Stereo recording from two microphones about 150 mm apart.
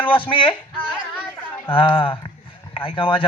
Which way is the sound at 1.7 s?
35° left (ahead or behind).